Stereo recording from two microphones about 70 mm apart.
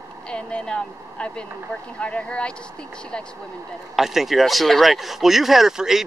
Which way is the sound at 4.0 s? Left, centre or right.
Centre.